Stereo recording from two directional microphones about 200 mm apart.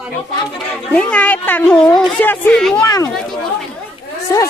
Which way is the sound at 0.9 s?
5° left (ahead or behind).